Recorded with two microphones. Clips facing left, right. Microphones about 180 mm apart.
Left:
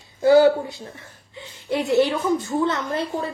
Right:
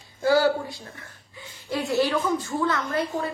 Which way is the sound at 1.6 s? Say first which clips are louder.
Left 5 dB; 20° left (ahead or behind).